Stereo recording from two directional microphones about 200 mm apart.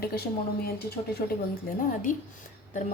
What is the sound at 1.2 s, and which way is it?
Speech, 45° left (ahead or behind).